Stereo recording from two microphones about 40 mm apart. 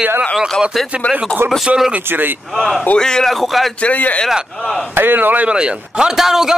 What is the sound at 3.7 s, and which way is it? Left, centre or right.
Speech, left.